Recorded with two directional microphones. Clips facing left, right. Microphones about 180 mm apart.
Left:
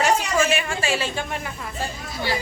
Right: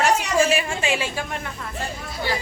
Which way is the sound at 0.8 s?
15° right (ahead or behind).